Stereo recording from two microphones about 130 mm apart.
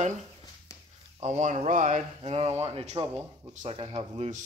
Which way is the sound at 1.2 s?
65° right (ahead or behind).